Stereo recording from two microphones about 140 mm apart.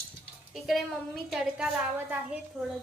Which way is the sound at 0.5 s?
Centre (ahead or behind).